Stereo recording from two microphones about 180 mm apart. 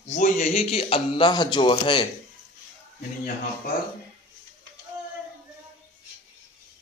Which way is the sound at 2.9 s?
50° left (ahead or behind).